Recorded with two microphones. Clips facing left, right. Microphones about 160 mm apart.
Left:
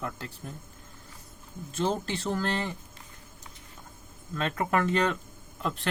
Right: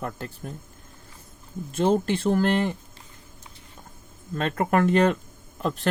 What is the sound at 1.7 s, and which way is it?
Speech, 55° right (ahead or behind).